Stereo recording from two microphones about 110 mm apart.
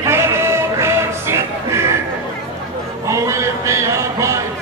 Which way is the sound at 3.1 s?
25° right (ahead or behind).